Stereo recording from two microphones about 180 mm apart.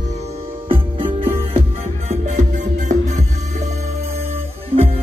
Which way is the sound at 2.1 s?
40° right (ahead or behind).